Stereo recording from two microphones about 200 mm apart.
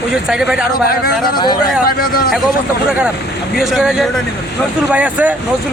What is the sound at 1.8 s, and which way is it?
Speech, 45° left (ahead or behind).